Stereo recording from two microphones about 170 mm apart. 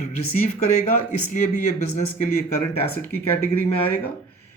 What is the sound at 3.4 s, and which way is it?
Speech, 10° left (ahead or behind).